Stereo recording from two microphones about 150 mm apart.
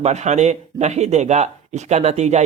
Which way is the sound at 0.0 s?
50° right (ahead or behind).